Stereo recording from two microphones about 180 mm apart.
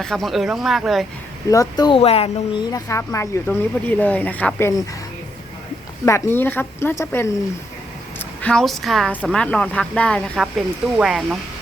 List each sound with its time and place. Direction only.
0.0 s a woman's voice: centre (ahead or behind)
1.5 s speech: 20° left (ahead or behind)
2.7 s speech: 15° left (ahead or behind)
6.1 s a woman's voice: 15° left (ahead or behind); by 11.3 s 5° right (ahead or behind)